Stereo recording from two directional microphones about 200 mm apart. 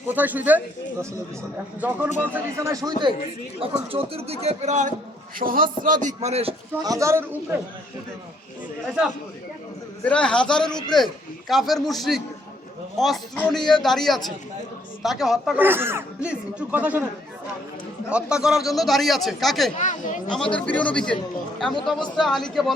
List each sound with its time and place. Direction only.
0.1 s speech: 10° right (ahead or behind); by 6.1 s 40° right (ahead or behind)
6.1 s a man's voice: 30° right (ahead or behind)
6.8 s speech: 15° right (ahead or behind)
10.0 s a man's voice: 5° left (ahead or behind)
18.1 s a man's voice: 5° right (ahead or behind)
19.7 s a woman's voice: 40° left (ahead or behind)
20.2 s a man's voice: 5° left (ahead or behind)